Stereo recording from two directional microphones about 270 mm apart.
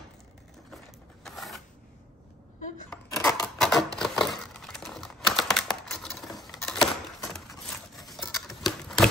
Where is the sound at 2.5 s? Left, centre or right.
Left.